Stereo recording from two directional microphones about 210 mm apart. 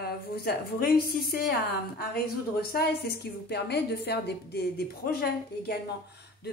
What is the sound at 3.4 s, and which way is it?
Speech, 50° left (ahead or behind).